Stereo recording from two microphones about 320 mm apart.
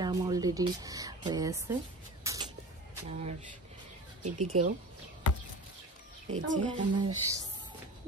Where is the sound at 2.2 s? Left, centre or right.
Centre.